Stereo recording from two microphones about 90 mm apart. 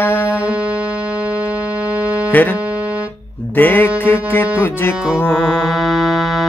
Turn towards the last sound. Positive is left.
turn(degrees=0)  # may be behind; listen again after turning